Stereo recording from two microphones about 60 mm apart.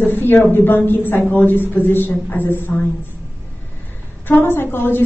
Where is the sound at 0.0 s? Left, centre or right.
Left.